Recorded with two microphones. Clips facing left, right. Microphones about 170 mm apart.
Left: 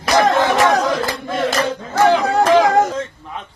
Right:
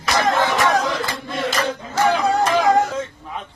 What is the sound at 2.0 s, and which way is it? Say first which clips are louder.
Speech: left 4 dB; 80° left.